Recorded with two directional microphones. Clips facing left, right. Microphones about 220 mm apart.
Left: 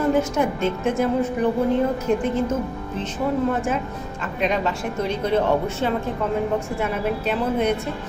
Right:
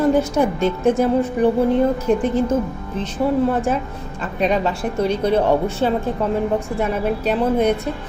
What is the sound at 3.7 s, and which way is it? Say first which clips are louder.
Speech: right 3 dB; 35° right (ahead or behind).